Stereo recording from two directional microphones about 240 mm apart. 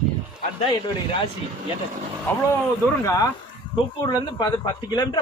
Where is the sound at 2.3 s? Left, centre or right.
Centre.